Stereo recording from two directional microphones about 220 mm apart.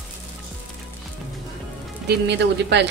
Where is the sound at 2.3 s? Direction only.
50° right (ahead or behind).